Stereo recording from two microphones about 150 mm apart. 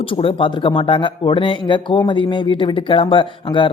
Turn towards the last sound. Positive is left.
turn(degrees=35)  # may be behind; listen again after turning